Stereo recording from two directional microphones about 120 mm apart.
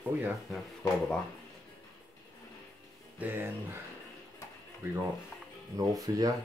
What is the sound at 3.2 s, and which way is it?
Speech, 15° right (ahead or behind).